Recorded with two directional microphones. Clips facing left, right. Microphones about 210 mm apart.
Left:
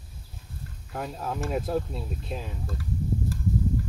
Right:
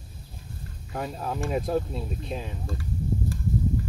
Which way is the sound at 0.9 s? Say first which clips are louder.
Right 1 dB; centre (ahead or behind).